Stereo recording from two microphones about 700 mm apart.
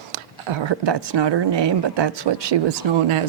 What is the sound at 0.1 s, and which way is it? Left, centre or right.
Speech, right.